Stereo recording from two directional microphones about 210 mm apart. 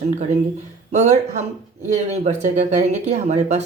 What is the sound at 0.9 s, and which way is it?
Speech, 35° right (ahead or behind).